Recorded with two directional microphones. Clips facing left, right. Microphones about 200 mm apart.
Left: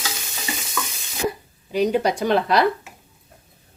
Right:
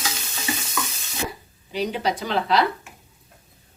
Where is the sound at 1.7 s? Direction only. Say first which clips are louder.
Left 5 dB; 50° left (ahead or behind).